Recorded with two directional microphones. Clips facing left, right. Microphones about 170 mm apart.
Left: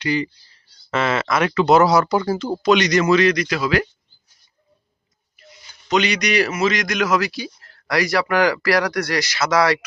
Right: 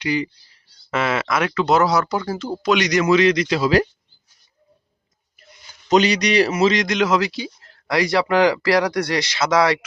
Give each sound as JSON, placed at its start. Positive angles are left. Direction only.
{"t": 0.0, "sound": "speech", "side_deg": -15}
{"t": 2.6, "sound": "a man's voice", "side_deg": -10}
{"t": 5.5, "sound": "a man's voice", "side_deg": -40}